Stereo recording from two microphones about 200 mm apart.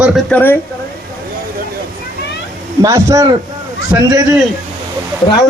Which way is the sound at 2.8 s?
15° right (ahead or behind).